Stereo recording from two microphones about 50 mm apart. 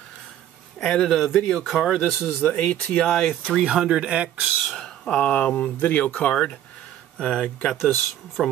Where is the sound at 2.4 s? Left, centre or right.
Left.